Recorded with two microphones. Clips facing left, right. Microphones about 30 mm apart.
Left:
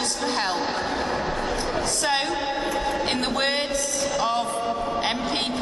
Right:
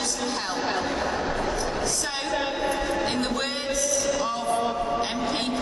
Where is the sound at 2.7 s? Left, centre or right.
Centre.